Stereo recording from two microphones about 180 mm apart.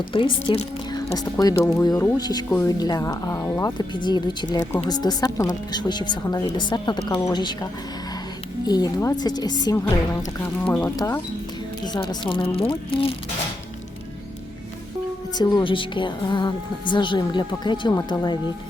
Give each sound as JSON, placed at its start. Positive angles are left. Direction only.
{"t": 0.1, "sound": "a woman's voice", "side_deg": 30}
{"t": 11.9, "sound": "a woman's voice", "side_deg": 30}
{"t": 15.4, "sound": "a woman's voice", "side_deg": 25}